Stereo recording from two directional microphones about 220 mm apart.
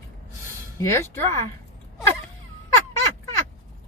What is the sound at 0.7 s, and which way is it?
Speech, 15° left (ahead or behind).